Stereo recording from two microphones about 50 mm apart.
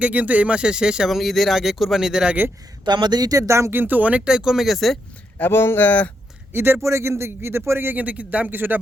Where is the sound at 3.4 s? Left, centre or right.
Right.